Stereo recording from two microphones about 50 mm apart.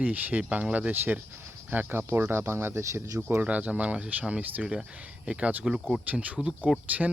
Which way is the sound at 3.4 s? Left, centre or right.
Right.